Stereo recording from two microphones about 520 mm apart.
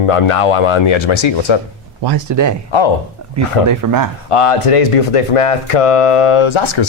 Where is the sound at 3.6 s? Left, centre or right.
Right.